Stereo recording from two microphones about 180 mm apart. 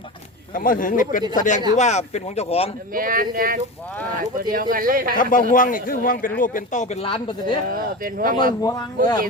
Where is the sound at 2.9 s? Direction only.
50° right (ahead or behind).